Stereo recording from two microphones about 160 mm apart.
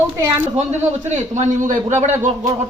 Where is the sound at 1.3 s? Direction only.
50° right (ahead or behind).